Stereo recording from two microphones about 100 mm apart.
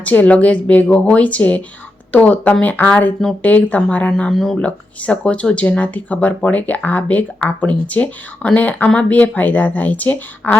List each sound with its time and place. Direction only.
0.0 s speech: 15° left (ahead or behind)